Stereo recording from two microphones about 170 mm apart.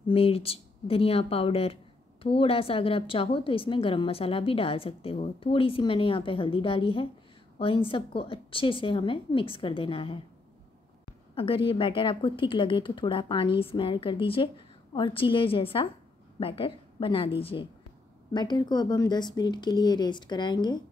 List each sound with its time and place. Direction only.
0.0 s a woman's voice: 35° left (ahead or behind)
11.3 s a woman's voice: 30° left (ahead or behind)